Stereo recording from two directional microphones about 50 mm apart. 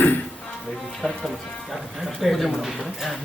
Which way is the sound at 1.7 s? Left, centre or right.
Centre.